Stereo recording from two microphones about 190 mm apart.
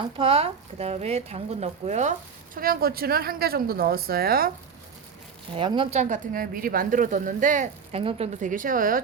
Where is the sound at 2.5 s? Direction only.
50° right (ahead or behind).